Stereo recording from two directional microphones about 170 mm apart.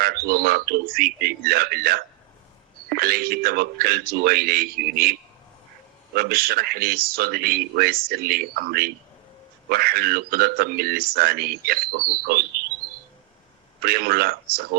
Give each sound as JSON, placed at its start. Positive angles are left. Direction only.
{"t": 0.0, "sound": "speech", "side_deg": -60}
{"t": 6.1, "sound": "speech", "side_deg": -65}
{"t": 13.8, "sound": "speech", "side_deg": -65}